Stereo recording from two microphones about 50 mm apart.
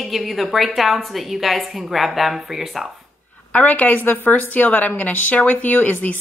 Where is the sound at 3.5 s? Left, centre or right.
Left.